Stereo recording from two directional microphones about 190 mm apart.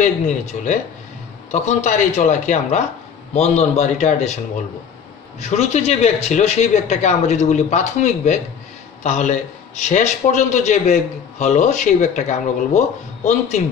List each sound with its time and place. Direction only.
0.0 s a man's voice: 40° left (ahead or behind)
5.4 s a man's voice: 35° left (ahead or behind)